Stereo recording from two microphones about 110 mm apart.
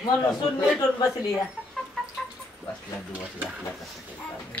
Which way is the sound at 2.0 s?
5° left (ahead or behind).